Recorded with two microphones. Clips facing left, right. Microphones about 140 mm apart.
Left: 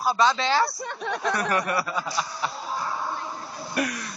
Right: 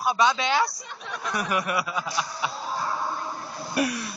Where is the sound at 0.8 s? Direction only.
65° left (ahead or behind).